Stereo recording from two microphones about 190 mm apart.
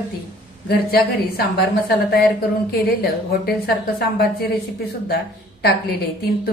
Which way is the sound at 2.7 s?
55° left (ahead or behind).